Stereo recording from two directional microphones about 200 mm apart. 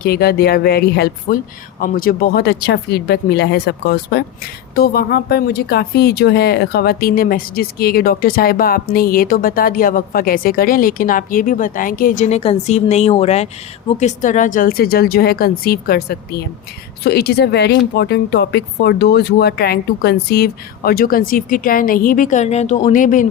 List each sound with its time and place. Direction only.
0.0 s speech: 50° left (ahead or behind)